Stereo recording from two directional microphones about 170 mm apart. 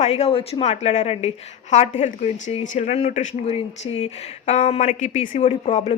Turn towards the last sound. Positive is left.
turn(degrees=40)  # may be behind; listen again after turning